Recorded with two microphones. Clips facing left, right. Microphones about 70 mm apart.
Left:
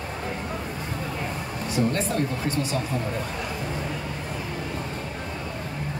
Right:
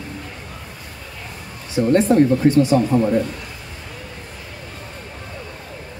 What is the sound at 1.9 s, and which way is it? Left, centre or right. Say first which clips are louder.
Speech: right 12 dB; right.